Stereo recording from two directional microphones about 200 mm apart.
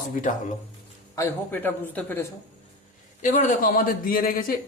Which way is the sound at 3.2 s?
40° left (ahead or behind).